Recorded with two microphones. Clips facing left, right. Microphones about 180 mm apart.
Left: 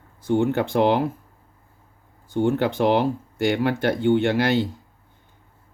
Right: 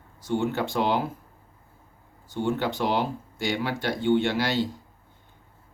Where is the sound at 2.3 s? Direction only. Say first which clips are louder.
Left 6 dB; 55° left (ahead or behind).